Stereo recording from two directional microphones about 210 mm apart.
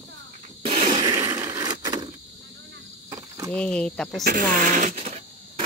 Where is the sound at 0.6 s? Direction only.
30° right (ahead or behind).